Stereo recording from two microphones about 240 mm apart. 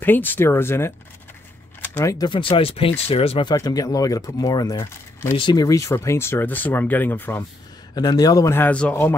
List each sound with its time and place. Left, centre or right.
0.0 s speech: centre